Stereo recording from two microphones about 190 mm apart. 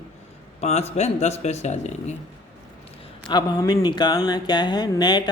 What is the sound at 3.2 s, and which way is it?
Mantra, 20° left (ahead or behind).